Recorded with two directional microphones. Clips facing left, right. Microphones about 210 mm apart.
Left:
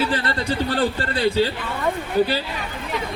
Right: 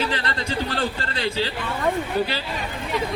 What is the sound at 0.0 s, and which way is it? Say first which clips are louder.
A man's voice: left 3 dB; 35° left (ahead or behind).